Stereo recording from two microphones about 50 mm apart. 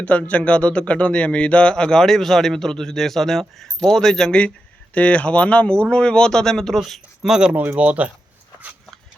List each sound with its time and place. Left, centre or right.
0.0 s speech: left; by 4.4 s centre
4.9 s speech: left; by 7.3 s centre
7.3 s speech: centre
7.8 s speech: right